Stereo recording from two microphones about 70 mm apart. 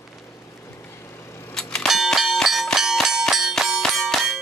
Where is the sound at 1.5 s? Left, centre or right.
Centre.